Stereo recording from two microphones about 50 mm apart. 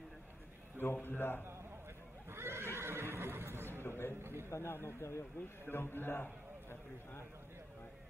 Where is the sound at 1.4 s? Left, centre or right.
Right.